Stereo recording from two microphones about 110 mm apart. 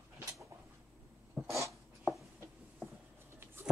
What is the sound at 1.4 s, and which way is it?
Cough, 15° right (ahead or behind).